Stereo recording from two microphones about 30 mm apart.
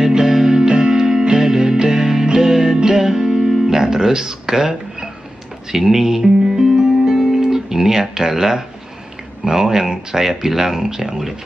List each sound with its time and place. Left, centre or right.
0.0 s music: centre
3.8 s a sound: right
5.7 s music: centre
7.3 s guitar: centre
8.1 s speech: centre